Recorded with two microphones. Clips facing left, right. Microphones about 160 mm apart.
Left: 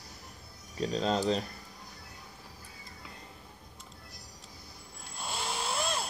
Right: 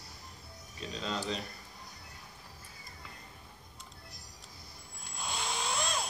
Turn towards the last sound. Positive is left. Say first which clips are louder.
# left 2 dB
turn(degrees=5)  # may be behind; listen again after turning